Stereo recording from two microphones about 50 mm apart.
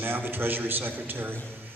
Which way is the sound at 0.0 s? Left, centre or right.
Right.